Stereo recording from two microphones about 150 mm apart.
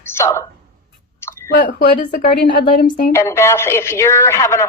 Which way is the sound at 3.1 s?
20° left (ahead or behind).